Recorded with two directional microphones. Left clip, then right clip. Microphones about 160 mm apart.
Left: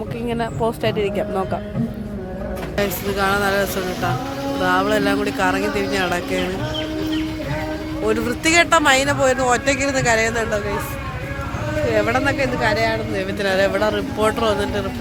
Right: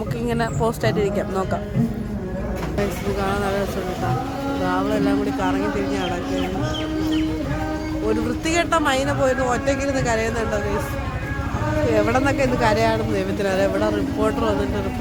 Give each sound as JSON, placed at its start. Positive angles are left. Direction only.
{"t": 0.3, "sound": "speech", "side_deg": 5}
{"t": 2.7, "sound": "a man's voice", "side_deg": 10}
{"t": 4.6, "sound": "a man's voice", "side_deg": 10}
{"t": 8.0, "sound": "a man's voice", "side_deg": 15}
{"t": 11.9, "sound": "speech", "side_deg": -15}
{"t": 12.5, "sound": "speech", "side_deg": -30}
{"t": 13.4, "sound": "speech", "side_deg": -10}